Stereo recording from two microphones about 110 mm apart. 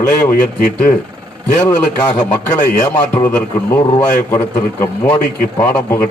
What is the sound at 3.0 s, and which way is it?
A man's voice, 20° left (ahead or behind).